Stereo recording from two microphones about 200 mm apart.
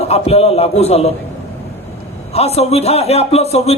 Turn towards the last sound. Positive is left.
turn(degrees=30)  # may be behind; listen again after turning